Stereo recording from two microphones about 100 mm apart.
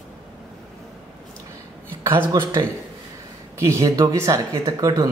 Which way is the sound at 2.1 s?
50° right (ahead or behind).